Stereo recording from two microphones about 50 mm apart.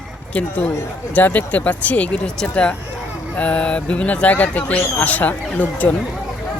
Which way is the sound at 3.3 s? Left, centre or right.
Left.